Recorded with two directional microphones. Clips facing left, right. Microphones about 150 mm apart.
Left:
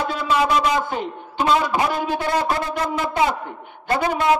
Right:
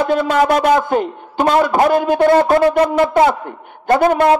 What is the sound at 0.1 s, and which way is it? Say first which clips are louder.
A man's voice: right 5 dB; 55° right (ahead or behind).